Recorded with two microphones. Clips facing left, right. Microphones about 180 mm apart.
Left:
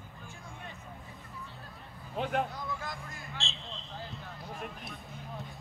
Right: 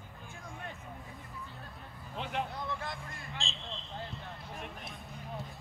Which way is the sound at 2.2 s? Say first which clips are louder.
Left 5 dB; 45° left (ahead or behind).